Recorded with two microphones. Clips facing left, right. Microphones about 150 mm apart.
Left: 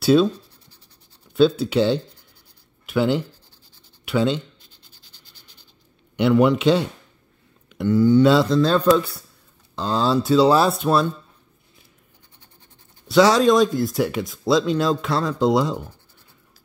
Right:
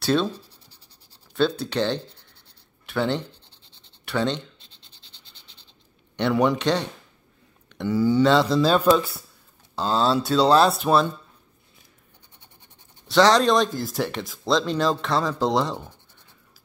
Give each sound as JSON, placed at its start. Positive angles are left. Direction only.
{"t": 0.0, "sound": "speech", "side_deg": 5}
{"t": 1.3, "sound": "speech", "side_deg": 5}
{"t": 3.4, "sound": "scratch", "side_deg": -25}
{"t": 4.0, "sound": "speech", "side_deg": 5}
{"t": 6.6, "sound": "speech", "side_deg": 5}
{"t": 7.9, "sound": "speech", "side_deg": -10}
{"t": 8.2, "sound": "speech", "side_deg": 5}
{"t": 8.5, "sound": "speech", "side_deg": -15}
{"t": 13.1, "sound": "speech", "side_deg": 5}